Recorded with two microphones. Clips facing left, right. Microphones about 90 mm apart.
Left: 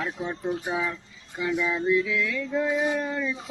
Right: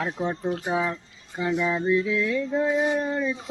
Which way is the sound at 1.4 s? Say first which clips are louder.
Right 2 dB; 25° right (ahead or behind).